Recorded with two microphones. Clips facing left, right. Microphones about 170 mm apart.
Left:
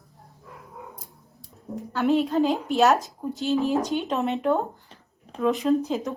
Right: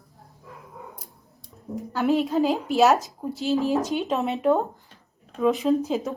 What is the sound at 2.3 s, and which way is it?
A woman's voice, centre (ahead or behind).